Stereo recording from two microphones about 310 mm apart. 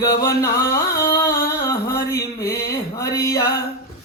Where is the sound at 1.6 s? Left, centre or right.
Centre.